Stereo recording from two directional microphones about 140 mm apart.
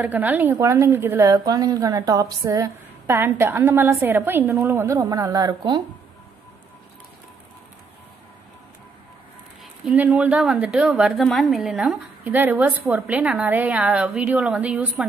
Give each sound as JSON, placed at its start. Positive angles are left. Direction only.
{"t": 0.0, "sound": "a woman's voice", "side_deg": -10}
{"t": 9.8, "sound": "a woman's voice", "side_deg": -10}